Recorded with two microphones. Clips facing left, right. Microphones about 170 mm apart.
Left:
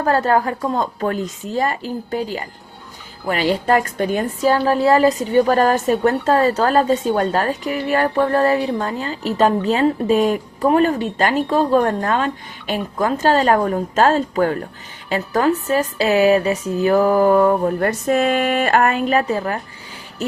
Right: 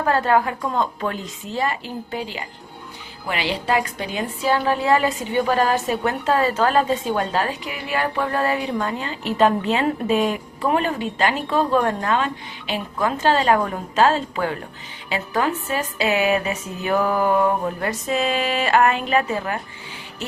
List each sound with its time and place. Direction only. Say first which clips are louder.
0.0 s a woman's voice: left 2 dB; 40° left (ahead or behind)